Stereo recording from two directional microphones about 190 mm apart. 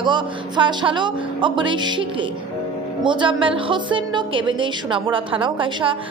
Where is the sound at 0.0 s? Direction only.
25° right (ahead or behind).